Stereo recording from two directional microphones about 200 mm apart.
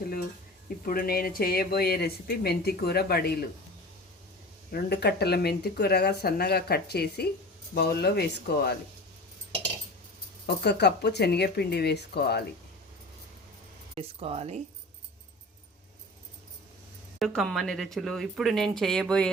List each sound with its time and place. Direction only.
0.9 s speech: 45° left (ahead or behind)
4.7 s speech: 55° left (ahead or behind)
10.4 s speech: 55° left (ahead or behind)
13.9 s speech: 30° right (ahead or behind)
17.2 s speech: centre (ahead or behind)